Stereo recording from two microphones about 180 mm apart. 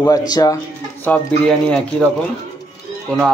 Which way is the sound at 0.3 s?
20° left (ahead or behind).